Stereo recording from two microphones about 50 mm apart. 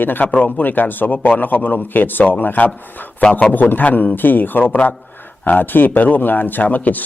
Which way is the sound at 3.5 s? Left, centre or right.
Left.